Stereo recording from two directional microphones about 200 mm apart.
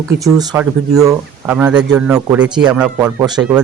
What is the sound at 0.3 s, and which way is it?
A man's voice, 10° right (ahead or behind).